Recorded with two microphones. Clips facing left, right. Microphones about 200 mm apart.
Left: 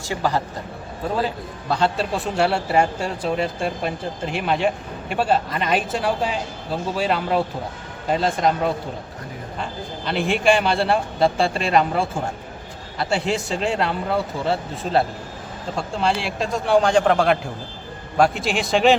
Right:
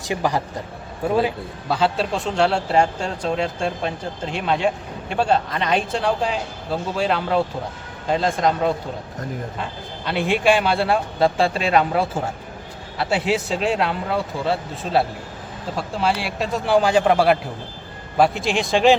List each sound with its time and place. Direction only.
0.0 s a man's voice: 15° right (ahead or behind)
1.7 s a man's voice: centre (ahead or behind)
10.2 s a man's voice: centre (ahead or behind)